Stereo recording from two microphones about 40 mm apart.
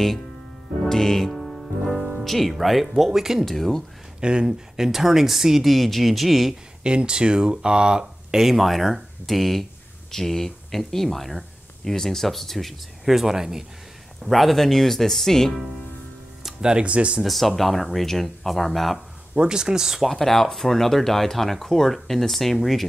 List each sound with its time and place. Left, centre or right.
0.8 s music: centre
2.2 s speech: centre
3.4 s speech: centre
4.2 s speech: right
4.7 s speech: centre
6.8 s speech: right
8.4 s speech: centre
14.2 s speech: centre
16.4 s music: centre
16.8 s speech: right
17.2 s speech: centre
19.3 s speech: right
20.1 s speech: centre